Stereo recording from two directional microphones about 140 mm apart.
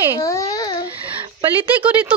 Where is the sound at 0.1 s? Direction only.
25° left (ahead or behind).